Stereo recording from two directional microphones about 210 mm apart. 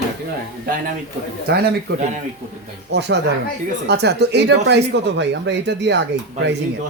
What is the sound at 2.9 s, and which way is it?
A man's voice, 55° right (ahead or behind).